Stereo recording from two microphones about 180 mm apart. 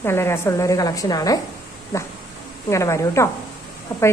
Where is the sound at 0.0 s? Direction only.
15° left (ahead or behind).